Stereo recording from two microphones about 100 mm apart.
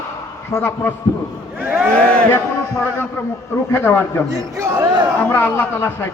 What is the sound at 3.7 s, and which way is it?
Speech, 20° left (ahead or behind).